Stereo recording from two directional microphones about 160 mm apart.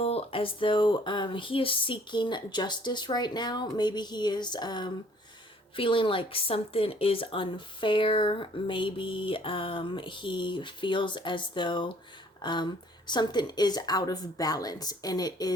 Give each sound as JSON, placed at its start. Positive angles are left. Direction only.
{"t": 0.0, "sound": "a woman's voice", "side_deg": 35}